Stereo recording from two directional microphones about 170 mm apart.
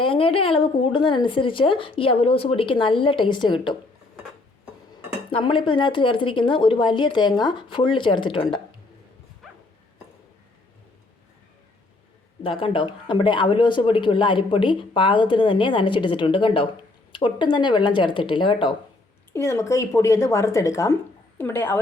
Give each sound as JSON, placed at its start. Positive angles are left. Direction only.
{"t": 0.0, "sound": "speech", "side_deg": 30}
{"t": 5.3, "sound": "speech", "side_deg": 30}
{"t": 12.4, "sound": "speech", "side_deg": 30}
{"t": 19.3, "sound": "a woman's voice", "side_deg": 15}